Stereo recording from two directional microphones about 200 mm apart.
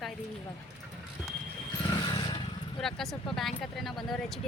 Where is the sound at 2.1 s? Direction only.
20° left (ahead or behind).